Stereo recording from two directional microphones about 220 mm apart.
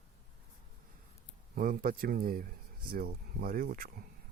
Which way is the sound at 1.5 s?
40° right (ahead or behind).